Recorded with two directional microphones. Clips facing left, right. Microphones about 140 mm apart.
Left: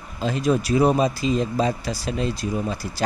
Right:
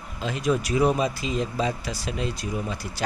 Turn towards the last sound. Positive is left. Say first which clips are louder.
# left 4 dB
turn(degrees=35)  # may be behind; listen again after turning